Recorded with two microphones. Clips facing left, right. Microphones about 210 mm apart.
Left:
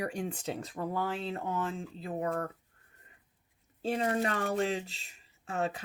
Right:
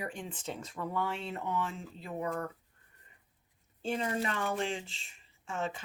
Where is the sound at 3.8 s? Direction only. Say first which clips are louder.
Left 3 dB; 40° left (ahead or behind).